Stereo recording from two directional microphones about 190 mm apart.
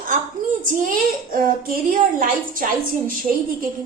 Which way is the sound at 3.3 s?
40° right (ahead or behind).